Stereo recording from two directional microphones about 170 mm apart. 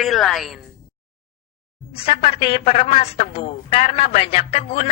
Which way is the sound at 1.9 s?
35° left (ahead or behind).